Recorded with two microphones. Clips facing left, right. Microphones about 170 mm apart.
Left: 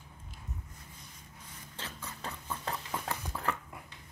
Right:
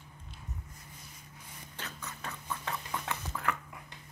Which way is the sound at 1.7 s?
30° left (ahead or behind).